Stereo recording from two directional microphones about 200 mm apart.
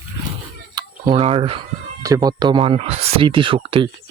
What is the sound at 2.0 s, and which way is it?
Speech, 15° right (ahead or behind).